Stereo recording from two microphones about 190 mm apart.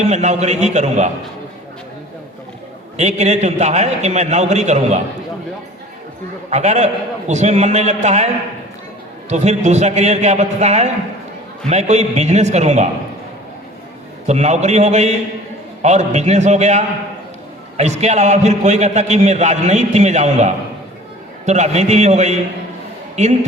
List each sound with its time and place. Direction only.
0.0 s a man's voice: 35° right (ahead or behind)
3.0 s a man's voice: 35° right (ahead or behind)
6.5 s a man's voice: 35° right (ahead or behind)
9.3 s a man's voice: 35° right (ahead or behind)
14.3 s a man's voice: 35° right (ahead or behind)